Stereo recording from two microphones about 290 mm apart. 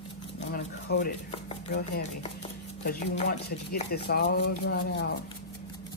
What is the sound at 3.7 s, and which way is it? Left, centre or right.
Speech, left.